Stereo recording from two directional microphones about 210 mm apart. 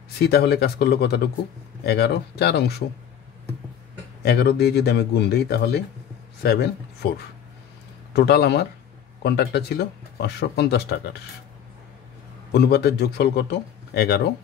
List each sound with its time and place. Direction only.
0.2 s speech: 50° left (ahead or behind)
4.2 s speech: 50° left (ahead or behind)
8.1 s speech: 50° left (ahead or behind)
12.5 s speech: 50° left (ahead or behind)